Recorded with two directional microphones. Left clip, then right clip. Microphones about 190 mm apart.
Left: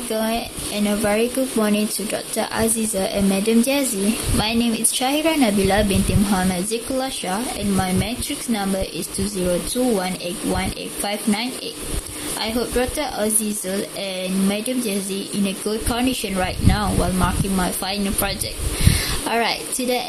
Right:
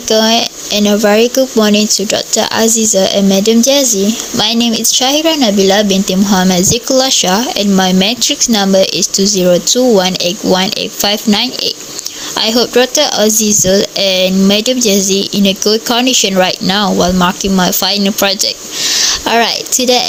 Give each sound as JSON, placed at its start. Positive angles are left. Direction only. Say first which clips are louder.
{"t": 0.1, "sound": "speech", "louder": "right 14 dB", "side_deg": -45}